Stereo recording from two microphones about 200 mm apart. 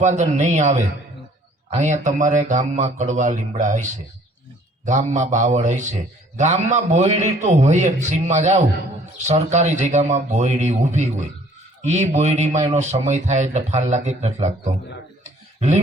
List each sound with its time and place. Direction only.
0.0 s a man's voice: 35° right (ahead or behind)
4.9 s a man's voice: 35° right (ahead or behind)
15.2 s a sound: 35° right (ahead or behind)